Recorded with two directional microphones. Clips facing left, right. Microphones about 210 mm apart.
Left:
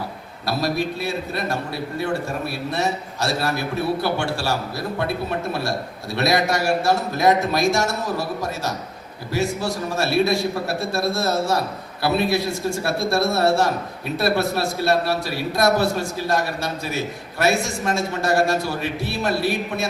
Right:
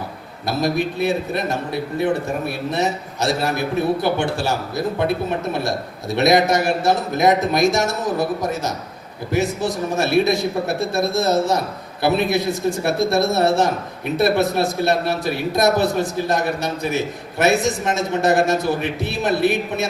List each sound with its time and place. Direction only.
0.4 s a man's voice: 20° right (ahead or behind)
5.5 s a man's voice: 20° right (ahead or behind)